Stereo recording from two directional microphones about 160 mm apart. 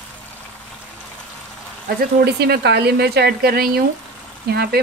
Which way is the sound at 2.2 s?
85° right.